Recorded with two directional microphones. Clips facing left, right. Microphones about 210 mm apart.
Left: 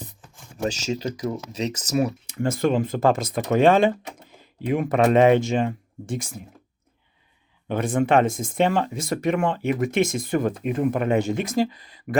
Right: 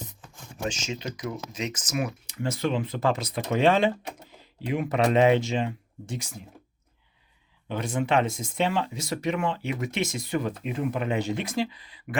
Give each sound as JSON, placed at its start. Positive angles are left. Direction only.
{"t": 0.6, "sound": "speech", "side_deg": 40}
{"t": 2.2, "sound": "speech", "side_deg": 50}
{"t": 7.7, "sound": "speech", "side_deg": 50}